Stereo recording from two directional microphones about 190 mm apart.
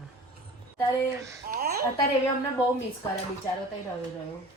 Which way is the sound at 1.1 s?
15° right (ahead or behind).